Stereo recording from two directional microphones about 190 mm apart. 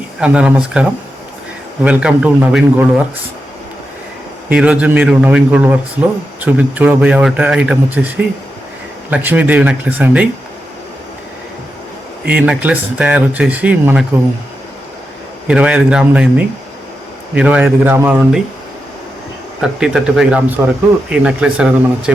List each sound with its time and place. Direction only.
0.2 s speech: 5° right (ahead or behind)
4.4 s a man's voice: 5° right (ahead or behind)
12.2 s a man's voice: 5° right (ahead or behind)
15.4 s a man's voice: 5° right (ahead or behind)
19.6 s speech: 5° right (ahead or behind)